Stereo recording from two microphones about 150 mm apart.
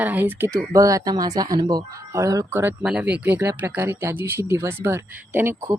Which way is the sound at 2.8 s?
5° right (ahead or behind).